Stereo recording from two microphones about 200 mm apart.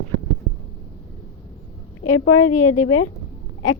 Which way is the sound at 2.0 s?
90° left.